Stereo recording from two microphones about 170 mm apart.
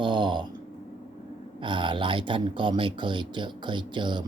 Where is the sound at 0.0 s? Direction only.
25° right (ahead or behind).